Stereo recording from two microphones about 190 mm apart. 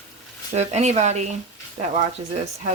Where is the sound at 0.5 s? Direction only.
35° right (ahead or behind).